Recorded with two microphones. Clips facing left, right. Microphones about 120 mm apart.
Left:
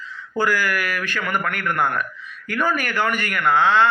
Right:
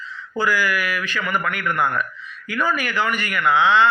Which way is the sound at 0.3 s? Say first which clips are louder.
Even; 50° left (ahead or behind).